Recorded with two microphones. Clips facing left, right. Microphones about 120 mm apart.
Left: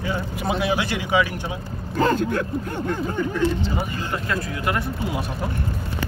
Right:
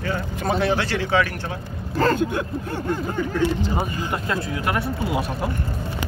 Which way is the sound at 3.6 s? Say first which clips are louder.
Right 2 dB; 20° right (ahead or behind).